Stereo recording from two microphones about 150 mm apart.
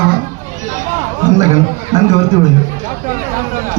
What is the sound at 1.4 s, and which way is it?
Speech, 50° right (ahead or behind).